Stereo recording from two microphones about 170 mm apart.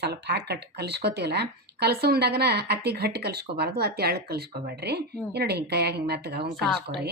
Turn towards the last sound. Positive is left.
turn(degrees=0)  # may be behind; listen again after turning